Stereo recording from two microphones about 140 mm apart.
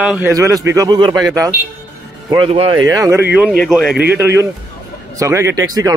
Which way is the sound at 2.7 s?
25° right (ahead or behind).